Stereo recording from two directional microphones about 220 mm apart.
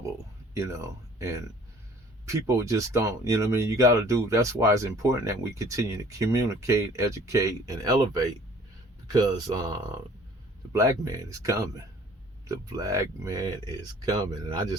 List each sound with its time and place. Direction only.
0.5 s speech: 15° right (ahead or behind)